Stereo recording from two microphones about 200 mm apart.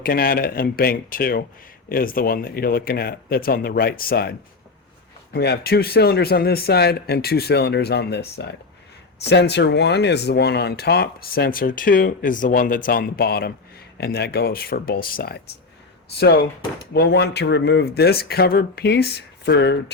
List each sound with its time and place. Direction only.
0.0 s speech: 45° left (ahead or behind)